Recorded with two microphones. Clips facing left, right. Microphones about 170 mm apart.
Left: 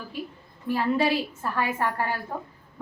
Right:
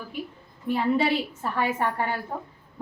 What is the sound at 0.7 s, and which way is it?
A woman's voice, 20° right (ahead or behind).